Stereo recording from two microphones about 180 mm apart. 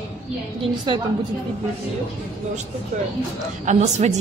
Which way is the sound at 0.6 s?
25° right (ahead or behind).